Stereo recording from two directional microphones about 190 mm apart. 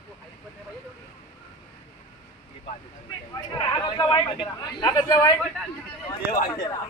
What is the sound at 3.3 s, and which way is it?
A man's voice, 20° left (ahead or behind).